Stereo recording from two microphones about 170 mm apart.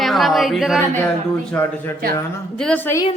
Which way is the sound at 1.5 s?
10° left (ahead or behind).